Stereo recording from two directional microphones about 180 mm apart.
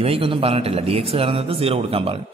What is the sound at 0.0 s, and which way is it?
A man's voice, 30° right (ahead or behind).